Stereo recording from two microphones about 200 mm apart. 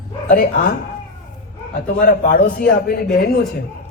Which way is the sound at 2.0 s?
45° left (ahead or behind).